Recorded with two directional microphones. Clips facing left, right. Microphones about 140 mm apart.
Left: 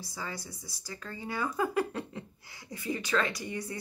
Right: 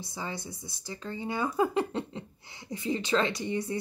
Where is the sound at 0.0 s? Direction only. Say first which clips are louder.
Right 3 dB; 20° right (ahead or behind).